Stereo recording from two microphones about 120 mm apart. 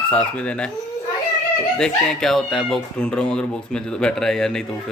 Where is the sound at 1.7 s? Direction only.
5° left (ahead or behind).